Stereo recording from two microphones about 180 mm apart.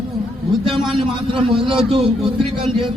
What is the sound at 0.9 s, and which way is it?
Speech, 30° right (ahead or behind).